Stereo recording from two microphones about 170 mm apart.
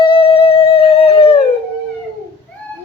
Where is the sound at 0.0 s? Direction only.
35° left (ahead or behind).